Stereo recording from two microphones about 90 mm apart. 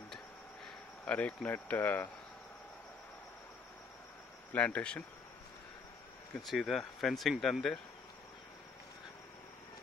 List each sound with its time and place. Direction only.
1.0 s speech: 15° left (ahead or behind)
4.5 s speech: 15° left (ahead or behind)
6.4 s speech: centre (ahead or behind)